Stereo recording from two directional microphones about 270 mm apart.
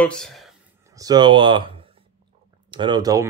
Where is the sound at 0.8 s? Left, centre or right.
Centre.